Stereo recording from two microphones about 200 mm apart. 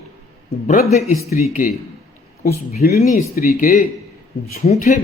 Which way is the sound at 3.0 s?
40° left (ahead or behind).